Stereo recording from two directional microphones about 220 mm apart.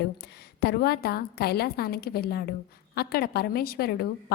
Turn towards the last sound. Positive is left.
turn(degrees=45)  # may be behind; listen again after turning